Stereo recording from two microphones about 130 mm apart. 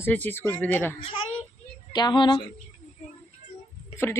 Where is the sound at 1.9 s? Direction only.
35° left (ahead or behind).